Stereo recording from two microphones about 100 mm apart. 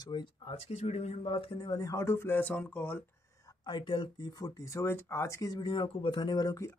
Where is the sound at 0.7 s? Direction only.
90° left; by 1.7 s 60° left (ahead or behind).